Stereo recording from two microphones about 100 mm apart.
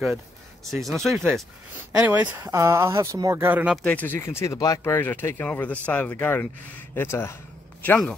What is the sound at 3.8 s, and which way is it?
Speech, 15° left (ahead or behind).